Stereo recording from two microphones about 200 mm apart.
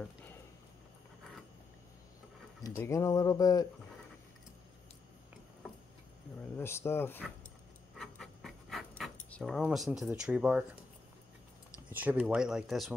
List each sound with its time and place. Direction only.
2.6 s speech: 15° left (ahead or behind)
6.5 s speech: 10° left (ahead or behind)
8.0 s dog: centre (ahead or behind)
11.9 s speech: 10° right (ahead or behind)